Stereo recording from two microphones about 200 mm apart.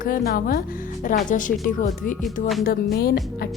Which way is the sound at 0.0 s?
45° left (ahead or behind).